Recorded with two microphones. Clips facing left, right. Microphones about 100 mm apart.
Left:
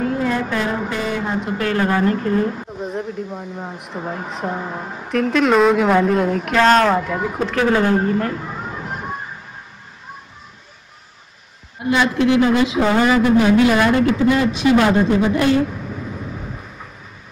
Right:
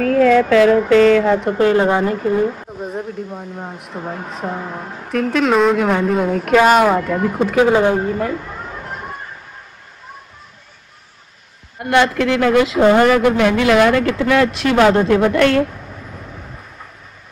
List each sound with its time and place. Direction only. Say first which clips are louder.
0.1 s speech: right 9 dB; 90° right
1.6 s speech: right 4 dB; 20° right (ahead or behind)
2.0 s a woman's voice: right 1 dB; 5° right (ahead or behind)
7.0 s a woman's voice: right 3 dB; centre (ahead or behind)
8.8 s a sound: left 1 dB; centre (ahead or behind)
11.8 s a man's voice: right 2 dB; 65° right (ahead or behind)